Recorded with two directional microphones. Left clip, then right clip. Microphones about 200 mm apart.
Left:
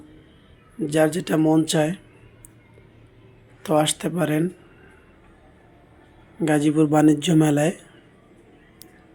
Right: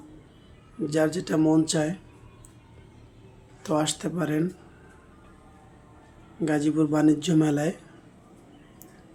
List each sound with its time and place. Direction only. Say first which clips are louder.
0.9 s speech: left 4 dB; 15° left (ahead or behind)
3.6 s speech: left 6 dB; 10° left (ahead or behind)
6.4 s speech: left 5 dB; 20° left (ahead or behind)